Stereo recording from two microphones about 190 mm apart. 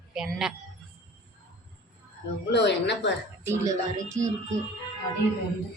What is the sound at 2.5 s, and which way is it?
Speech, 65° left (ahead or behind).